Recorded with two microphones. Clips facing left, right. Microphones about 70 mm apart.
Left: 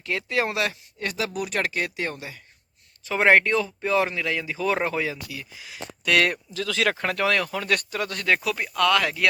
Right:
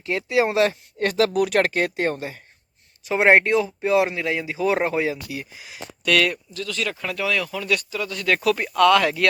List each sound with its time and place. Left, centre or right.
0.0 s speech: right
0.5 s speech: right
0.9 s speech: right
3.1 s speech: centre
6.7 s speech: left
7.0 s speech: left
8.4 s speech: centre